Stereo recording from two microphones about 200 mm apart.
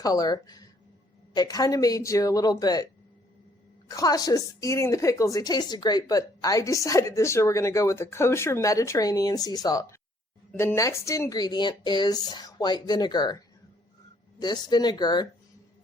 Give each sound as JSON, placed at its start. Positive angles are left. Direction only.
{"t": 0.0, "sound": "a woman's voice", "side_deg": 20}
{"t": 14.3, "sound": "speech", "side_deg": 20}